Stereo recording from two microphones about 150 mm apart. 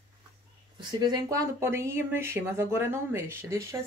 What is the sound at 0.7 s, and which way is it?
Speech, 25° right (ahead or behind).